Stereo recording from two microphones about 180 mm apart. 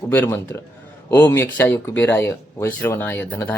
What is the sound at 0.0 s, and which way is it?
Speech, 10° left (ahead or behind).